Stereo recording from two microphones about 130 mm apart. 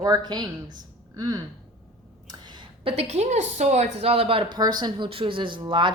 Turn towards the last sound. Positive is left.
turn(degrees=-35)  # may be behind; listen again after turning